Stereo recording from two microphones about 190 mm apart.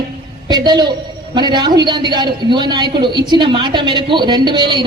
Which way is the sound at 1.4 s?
25° right (ahead or behind).